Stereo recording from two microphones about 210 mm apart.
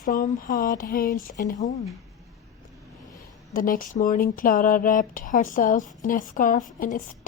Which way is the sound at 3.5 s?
40° left (ahead or behind).